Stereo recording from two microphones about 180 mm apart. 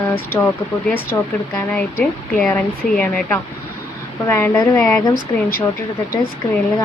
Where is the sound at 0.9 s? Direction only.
10° left (ahead or behind).